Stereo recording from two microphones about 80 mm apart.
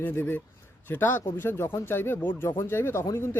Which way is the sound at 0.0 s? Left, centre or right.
Left.